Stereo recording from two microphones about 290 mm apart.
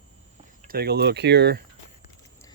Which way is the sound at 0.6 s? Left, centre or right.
Right.